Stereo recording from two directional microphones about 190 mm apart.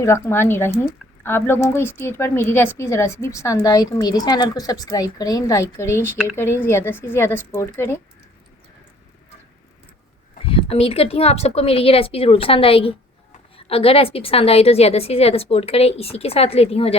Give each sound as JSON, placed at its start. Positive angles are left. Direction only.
{"t": 0.0, "sound": "speech", "side_deg": 15}
{"t": 10.4, "sound": "a woman's voice", "side_deg": 30}